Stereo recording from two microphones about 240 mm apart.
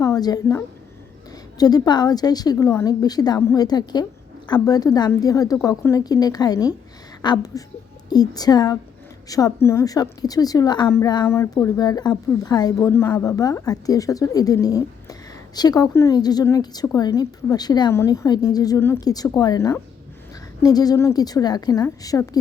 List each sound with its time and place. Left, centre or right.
0.0 s a woman's voice: centre